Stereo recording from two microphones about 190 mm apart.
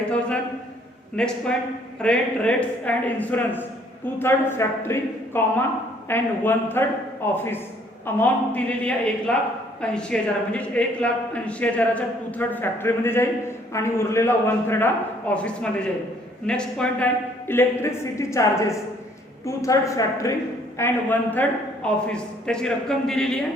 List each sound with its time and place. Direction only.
1.1 s a man's voice: 5° left (ahead or behind)